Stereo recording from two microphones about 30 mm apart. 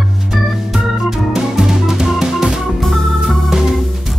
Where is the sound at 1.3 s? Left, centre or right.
Centre.